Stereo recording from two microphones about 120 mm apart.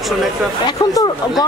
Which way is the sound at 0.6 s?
30° left (ahead or behind).